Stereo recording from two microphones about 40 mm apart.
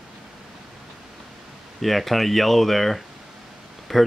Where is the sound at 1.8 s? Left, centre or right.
Centre.